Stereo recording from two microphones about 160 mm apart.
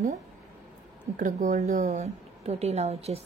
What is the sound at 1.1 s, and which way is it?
Speech, 50° right (ahead or behind).